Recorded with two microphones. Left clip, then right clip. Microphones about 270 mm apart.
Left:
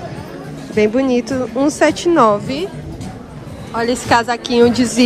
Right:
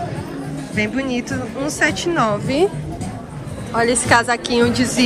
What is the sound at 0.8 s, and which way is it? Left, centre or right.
Speech, centre.